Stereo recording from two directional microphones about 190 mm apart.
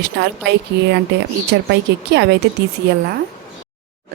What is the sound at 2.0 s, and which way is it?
Speech, 65° right (ahead or behind).